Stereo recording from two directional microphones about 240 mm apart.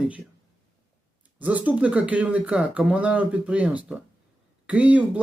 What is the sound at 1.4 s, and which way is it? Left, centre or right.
Speech, centre.